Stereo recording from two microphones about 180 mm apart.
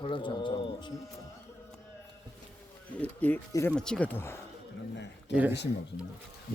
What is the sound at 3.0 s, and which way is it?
Speech, 10° left (ahead or behind).